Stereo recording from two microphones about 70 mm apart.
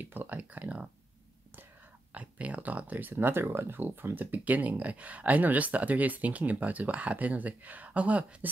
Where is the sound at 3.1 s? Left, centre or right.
Right.